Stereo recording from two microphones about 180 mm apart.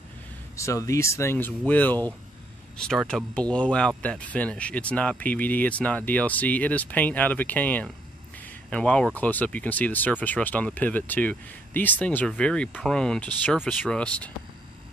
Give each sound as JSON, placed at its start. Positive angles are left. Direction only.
{"t": 0.6, "sound": "speech", "side_deg": 15}